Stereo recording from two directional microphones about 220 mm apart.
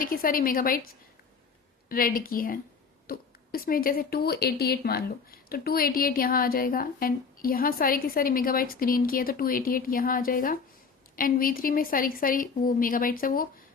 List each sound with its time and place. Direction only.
0.0 s a woman's voice: 40° left (ahead or behind)
1.9 s a woman's voice: 40° left (ahead or behind)